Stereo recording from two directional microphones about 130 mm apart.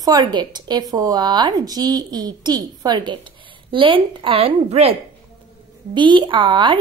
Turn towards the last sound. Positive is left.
turn(degrees=-40)  # may be behind; listen again after turning